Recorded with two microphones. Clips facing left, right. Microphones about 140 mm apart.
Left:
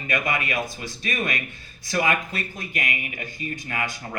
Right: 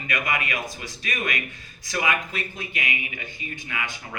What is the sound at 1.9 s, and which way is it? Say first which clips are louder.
Speech: left 2 dB; 40° left (ahead or behind).